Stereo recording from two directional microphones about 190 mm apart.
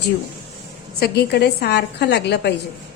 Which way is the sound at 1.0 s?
60° left (ahead or behind).